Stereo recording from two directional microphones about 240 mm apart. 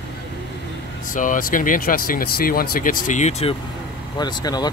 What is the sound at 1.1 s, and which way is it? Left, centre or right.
Speech, left.